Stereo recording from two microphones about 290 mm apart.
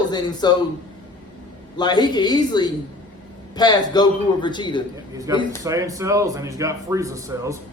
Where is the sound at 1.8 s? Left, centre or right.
Centre.